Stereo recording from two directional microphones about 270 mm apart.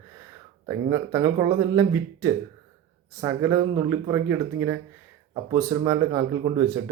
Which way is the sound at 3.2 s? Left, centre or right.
Centre.